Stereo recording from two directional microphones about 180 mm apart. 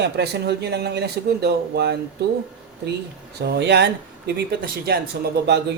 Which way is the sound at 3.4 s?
65° right (ahead or behind).